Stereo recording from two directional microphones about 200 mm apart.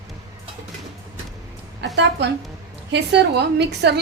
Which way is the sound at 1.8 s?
60° right (ahead or behind).